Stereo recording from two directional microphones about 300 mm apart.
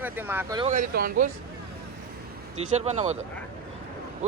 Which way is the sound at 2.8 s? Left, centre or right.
Right.